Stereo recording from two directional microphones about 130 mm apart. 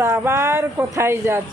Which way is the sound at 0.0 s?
25° right (ahead or behind).